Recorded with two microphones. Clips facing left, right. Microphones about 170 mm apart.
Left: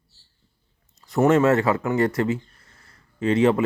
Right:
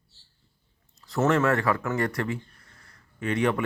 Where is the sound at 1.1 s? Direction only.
20° left (ahead or behind).